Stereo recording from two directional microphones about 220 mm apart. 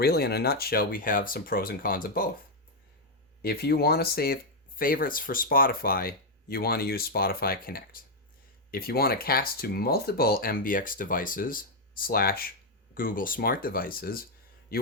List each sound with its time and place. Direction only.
0.0 s speech: 45° left (ahead or behind)
3.4 s speech: 45° left (ahead or behind)
14.7 s a sound: 45° left (ahead or behind)